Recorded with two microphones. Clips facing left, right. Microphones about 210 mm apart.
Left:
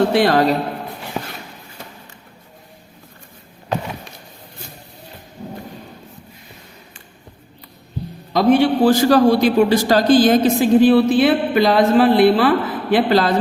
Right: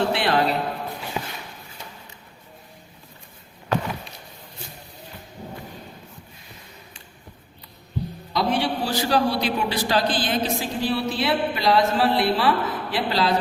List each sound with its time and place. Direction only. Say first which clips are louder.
0.1 s a man's voice: left 7 dB; 40° left (ahead or behind)
8.3 s a man's voice: left 10 dB; 50° left (ahead or behind)